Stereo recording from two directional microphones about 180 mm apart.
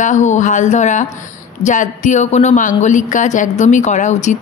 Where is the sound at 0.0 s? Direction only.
40° left (ahead or behind).